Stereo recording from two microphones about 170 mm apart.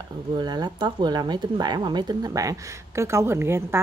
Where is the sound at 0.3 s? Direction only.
25° right (ahead or behind).